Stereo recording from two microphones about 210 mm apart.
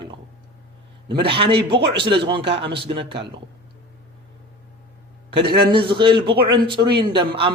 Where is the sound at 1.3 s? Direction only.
25° right (ahead or behind).